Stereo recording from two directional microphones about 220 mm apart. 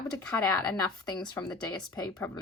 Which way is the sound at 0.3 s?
10° left (ahead or behind).